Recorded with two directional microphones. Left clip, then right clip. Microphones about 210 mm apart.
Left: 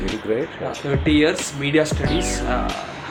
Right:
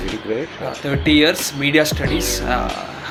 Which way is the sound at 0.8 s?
35° right (ahead or behind).